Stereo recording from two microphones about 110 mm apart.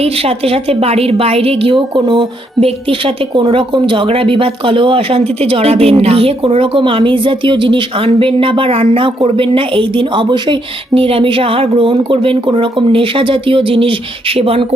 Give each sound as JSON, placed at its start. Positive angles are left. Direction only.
{"t": 0.0, "sound": "a woman's voice", "side_deg": -65}